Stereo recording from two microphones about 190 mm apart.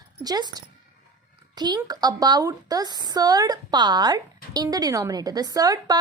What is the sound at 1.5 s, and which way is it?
A woman's voice, 20° right (ahead or behind).